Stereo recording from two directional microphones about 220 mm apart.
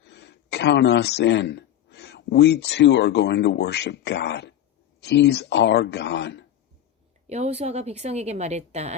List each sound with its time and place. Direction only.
0.0 s speech: 50° left (ahead or behind)
7.3 s a woman's voice: 30° right (ahead or behind)